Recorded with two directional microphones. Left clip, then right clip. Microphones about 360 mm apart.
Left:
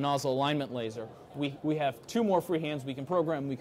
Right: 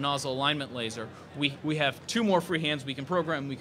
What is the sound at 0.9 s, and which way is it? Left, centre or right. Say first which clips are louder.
A man's voice: right 2 dB; left.